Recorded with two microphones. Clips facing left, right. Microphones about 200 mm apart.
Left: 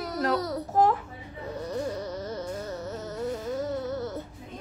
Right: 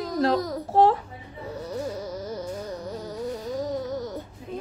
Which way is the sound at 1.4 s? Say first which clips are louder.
Even; 10° right (ahead or behind).